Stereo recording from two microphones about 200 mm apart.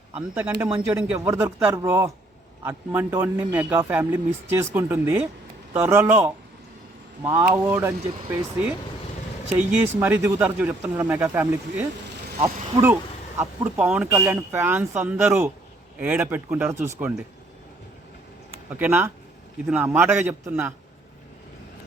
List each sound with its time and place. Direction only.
0.3 s speech: 10° right (ahead or behind)
18.8 s speech: 10° right (ahead or behind)